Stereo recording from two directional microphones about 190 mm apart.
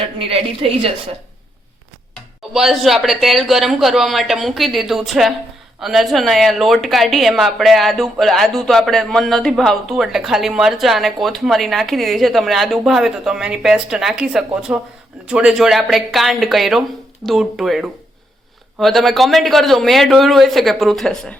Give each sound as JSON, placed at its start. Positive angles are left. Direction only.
{"t": 0.2, "sound": "a woman's voice", "side_deg": -30}
{"t": 2.5, "sound": "speech", "side_deg": 0}